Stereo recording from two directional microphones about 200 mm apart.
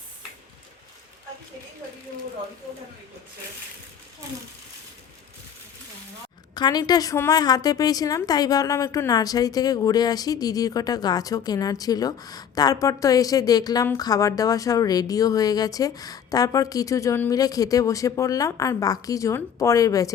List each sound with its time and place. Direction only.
6.5 s a woman's voice: 20° left (ahead or behind)